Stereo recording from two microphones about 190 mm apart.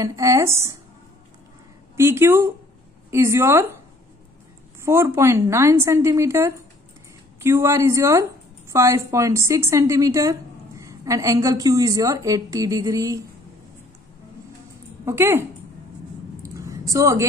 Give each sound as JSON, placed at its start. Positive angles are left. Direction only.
{"t": 0.0, "sound": "a woman's voice", "side_deg": -15}
{"t": 2.0, "sound": "a woman's voice", "side_deg": -15}
{"t": 4.8, "sound": "a woman's voice", "side_deg": -15}
{"t": 15.0, "sound": "a woman's voice", "side_deg": -10}
{"t": 16.4, "sound": "a sound", "side_deg": -15}